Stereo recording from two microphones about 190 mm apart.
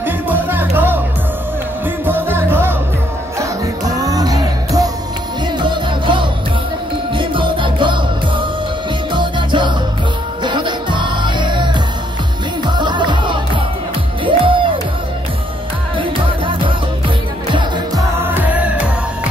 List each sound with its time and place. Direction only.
0.0 s music: 10° right (ahead or behind)
2.0 s music: 10° right (ahead or behind)
9.1 s music: 25° right (ahead or behind)
17.6 s music: 15° right (ahead or behind)